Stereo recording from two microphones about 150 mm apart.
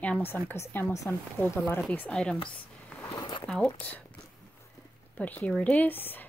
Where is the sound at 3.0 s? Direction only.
25° left (ahead or behind).